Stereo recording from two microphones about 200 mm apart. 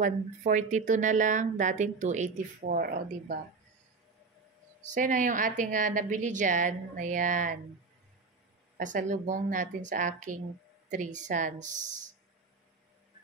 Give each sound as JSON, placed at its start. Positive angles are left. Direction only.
{"t": 0.0, "sound": "speech", "side_deg": -40}
{"t": 4.8, "sound": "speech", "side_deg": -40}
{"t": 8.7, "sound": "speech", "side_deg": -40}